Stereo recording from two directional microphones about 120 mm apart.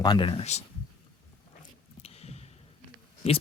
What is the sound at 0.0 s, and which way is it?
Speech, 40° left (ahead or behind).